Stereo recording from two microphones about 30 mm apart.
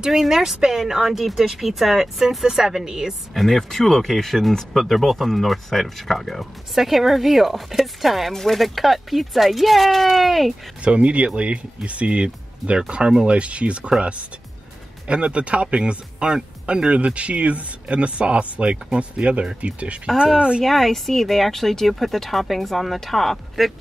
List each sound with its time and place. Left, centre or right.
0.3 s speech: centre
2.2 s a woman's voice: centre
3.3 s speech: centre
8.3 s speech: centre
10.8 s speech: right
15.0 s speech: right
16.6 s speech: right
20.3 s speech: right
20.6 s speech: centre